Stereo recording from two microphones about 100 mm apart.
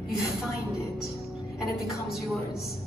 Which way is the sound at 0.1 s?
5° right (ahead or behind).